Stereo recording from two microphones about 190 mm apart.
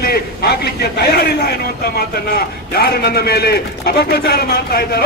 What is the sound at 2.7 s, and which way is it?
A man's voice, 55° left (ahead or behind).